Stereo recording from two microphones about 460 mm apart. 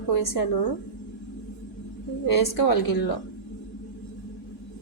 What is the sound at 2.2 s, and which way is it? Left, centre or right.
Speech, left.